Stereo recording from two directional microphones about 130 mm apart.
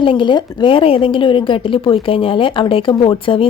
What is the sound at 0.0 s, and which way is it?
A woman's voice, 40° left (ahead or behind).